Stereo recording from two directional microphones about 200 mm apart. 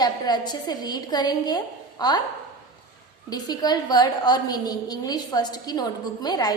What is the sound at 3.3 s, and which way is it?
A woman's voice, 20° left (ahead or behind).